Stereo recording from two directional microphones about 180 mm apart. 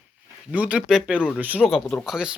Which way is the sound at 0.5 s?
5° right (ahead or behind).